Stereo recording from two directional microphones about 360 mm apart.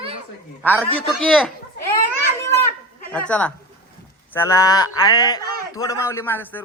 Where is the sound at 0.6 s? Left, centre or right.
Centre.